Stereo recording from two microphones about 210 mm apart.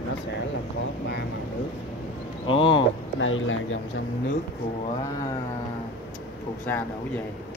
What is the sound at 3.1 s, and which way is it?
Speech, 65° left (ahead or behind).